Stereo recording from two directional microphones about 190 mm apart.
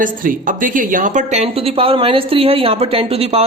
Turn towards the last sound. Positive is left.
turn(degrees=-30)  # may be behind; listen again after turning